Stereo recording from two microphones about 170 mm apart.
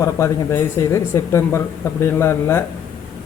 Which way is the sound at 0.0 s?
15° left (ahead or behind).